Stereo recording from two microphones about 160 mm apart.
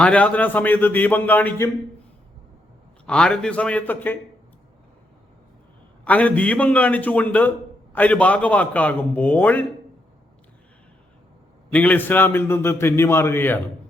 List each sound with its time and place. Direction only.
0.0 s a man's voice: 10° left (ahead or behind)
3.1 s a man's voice: 5° left (ahead or behind)
6.1 s a man's voice: 10° left (ahead or behind)
11.7 s a man's voice: 10° left (ahead or behind)